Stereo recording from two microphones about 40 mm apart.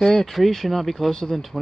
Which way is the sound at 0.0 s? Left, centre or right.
Centre.